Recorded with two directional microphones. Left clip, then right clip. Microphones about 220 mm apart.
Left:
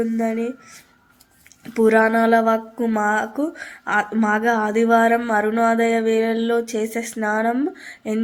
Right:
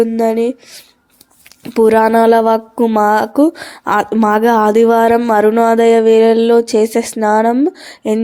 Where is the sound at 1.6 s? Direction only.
30° right (ahead or behind).